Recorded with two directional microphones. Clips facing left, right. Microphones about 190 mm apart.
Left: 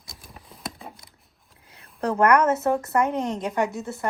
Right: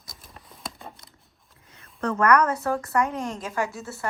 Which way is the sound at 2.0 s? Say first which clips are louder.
Left 2 dB; 30° left (ahead or behind).